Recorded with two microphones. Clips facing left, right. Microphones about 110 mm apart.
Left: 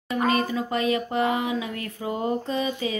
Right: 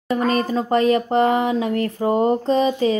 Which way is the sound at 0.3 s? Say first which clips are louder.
Right 6 dB; 40° right (ahead or behind).